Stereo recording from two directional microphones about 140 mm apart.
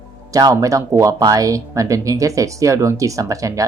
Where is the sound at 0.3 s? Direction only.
25° right (ahead or behind).